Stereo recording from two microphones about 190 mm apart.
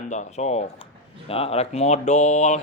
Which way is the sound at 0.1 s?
35° left (ahead or behind).